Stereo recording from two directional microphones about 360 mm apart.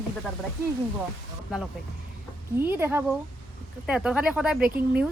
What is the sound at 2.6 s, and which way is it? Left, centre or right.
A woman's voice, centre.